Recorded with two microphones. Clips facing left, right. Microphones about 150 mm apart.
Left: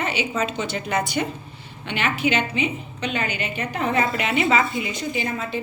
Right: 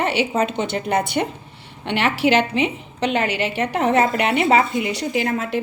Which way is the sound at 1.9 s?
70° right (ahead or behind).